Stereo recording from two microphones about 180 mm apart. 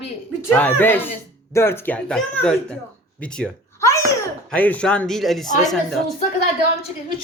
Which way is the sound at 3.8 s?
15° left (ahead or behind).